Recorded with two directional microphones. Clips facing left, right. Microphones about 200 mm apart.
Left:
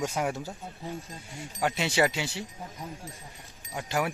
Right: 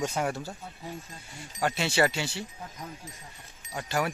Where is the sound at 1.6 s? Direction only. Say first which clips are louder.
Even; 15° left (ahead or behind).